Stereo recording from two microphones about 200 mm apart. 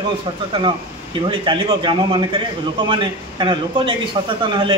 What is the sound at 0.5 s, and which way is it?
A man's voice, 25° right (ahead or behind).